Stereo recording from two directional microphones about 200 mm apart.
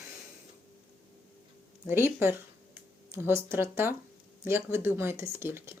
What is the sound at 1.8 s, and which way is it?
Speech, 10° right (ahead or behind).